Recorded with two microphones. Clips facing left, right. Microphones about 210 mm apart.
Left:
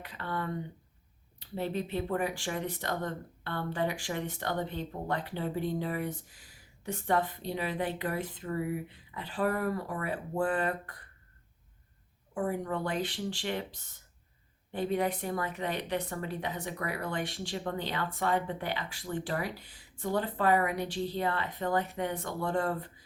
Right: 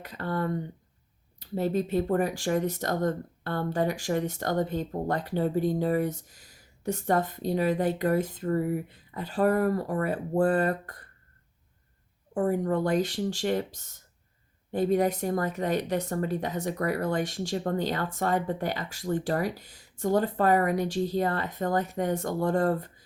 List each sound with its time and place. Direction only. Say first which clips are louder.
0.0 s speech: right 6 dB; 40° right (ahead or behind)
12.3 s speech: right 7 dB; 40° right (ahead or behind)